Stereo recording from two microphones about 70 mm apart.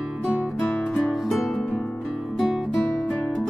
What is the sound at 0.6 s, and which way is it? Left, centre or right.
Music, centre.